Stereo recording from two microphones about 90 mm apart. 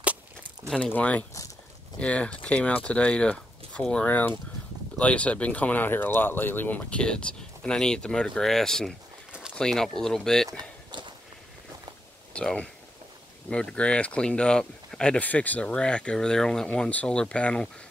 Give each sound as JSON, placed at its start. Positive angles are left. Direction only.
{"t": 0.0, "sound": "a sound", "side_deg": -15}
{"t": 0.9, "sound": "speech", "side_deg": 15}
{"t": 10.9, "sound": "walk", "side_deg": -60}
{"t": 12.4, "sound": "speech", "side_deg": 10}